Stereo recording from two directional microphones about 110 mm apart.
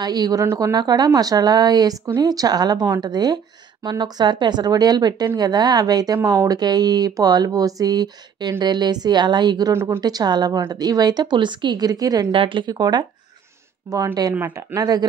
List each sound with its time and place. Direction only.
0.0 s speech: 35° right (ahead or behind)
9.8 s speech: 20° right (ahead or behind)
10.0 s speech: 40° right (ahead or behind)
12.3 s a woman's voice: 50° right (ahead or behind)
13.9 s speech: 20° right (ahead or behind)
14.7 s speech: 30° right (ahead or behind)